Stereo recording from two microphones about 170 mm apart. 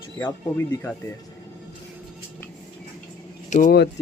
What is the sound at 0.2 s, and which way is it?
Speech, 15° left (ahead or behind).